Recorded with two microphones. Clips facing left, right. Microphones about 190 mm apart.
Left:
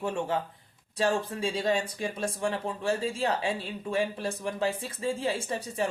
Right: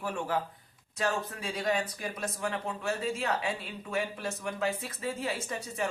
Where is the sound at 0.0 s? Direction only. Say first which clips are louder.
Left 3 dB; 25° left (ahead or behind).